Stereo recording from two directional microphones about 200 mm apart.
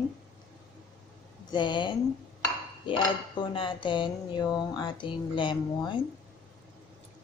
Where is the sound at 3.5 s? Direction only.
25° left (ahead or behind).